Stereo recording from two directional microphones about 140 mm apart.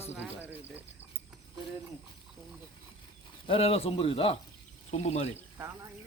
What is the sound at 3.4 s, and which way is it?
A man's voice, 40° left (ahead or behind).